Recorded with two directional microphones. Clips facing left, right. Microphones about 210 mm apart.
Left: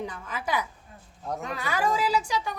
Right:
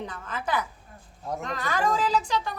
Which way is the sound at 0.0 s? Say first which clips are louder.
Even; 10° left (ahead or behind).